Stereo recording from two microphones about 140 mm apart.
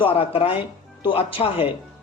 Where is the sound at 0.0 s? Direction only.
40° left (ahead or behind).